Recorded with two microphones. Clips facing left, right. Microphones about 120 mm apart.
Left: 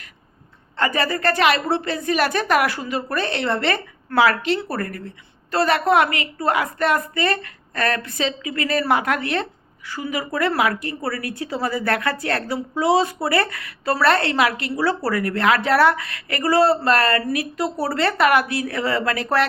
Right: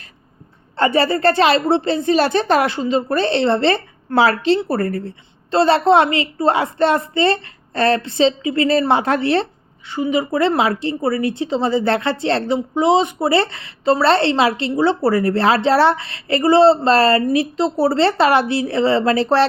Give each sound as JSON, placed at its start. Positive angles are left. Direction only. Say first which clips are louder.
{"t": 0.8, "sound": "a woman's voice", "louder": "right 6 dB", "side_deg": -30}